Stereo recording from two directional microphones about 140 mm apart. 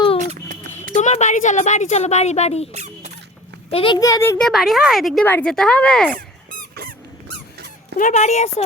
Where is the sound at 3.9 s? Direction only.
25° left (ahead or behind).